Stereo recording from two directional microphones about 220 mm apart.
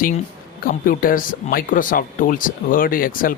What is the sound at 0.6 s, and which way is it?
Speech, 40° left (ahead or behind).